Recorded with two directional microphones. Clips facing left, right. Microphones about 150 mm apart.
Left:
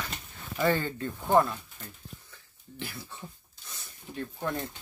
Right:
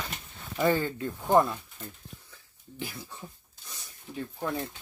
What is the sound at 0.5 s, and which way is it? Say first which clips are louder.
Speech: right 1 dB; 5° right (ahead or behind).